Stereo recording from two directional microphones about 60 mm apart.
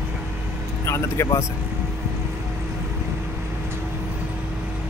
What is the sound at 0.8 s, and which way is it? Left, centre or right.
Speech, left.